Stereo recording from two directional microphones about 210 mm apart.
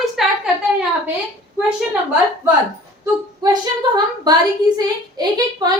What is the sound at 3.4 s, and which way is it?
A woman's voice, 20° right (ahead or behind).